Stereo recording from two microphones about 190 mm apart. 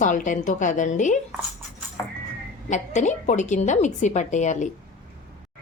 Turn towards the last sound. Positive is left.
turn(degrees=40)  # may be behind; listen again after turning